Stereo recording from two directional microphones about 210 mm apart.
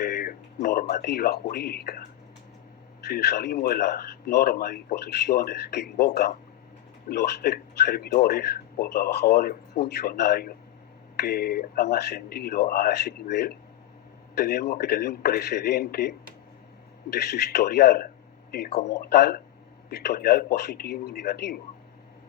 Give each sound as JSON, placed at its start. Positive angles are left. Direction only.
{"t": 0.0, "sound": "music", "side_deg": 45}
{"t": 1.0, "sound": "speech", "side_deg": 50}